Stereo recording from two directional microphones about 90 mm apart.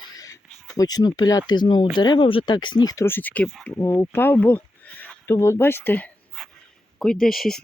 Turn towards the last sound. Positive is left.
turn(degrees=0)  # may be behind; listen again after turning